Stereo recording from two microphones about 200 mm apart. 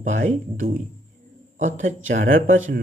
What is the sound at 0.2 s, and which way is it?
Speech, 45° right (ahead or behind).